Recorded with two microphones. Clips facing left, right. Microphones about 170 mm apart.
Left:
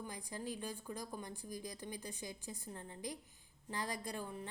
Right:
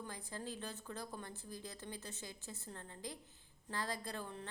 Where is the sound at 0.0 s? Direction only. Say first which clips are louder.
Left 2 dB; 15° left (ahead or behind).